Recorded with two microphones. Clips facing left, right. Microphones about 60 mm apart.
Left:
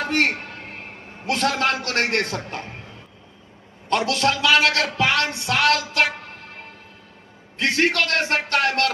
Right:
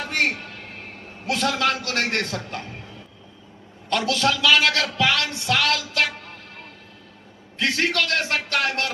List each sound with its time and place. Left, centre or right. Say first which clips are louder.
0.0 s a sound: left 3 dB; left
3.9 s speech: left 1 dB; left
7.6 s speech: left 2 dB; left